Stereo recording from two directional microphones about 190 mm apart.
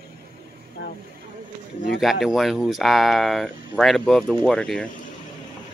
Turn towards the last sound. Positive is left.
turn(degrees=5)  # may be behind; listen again after turning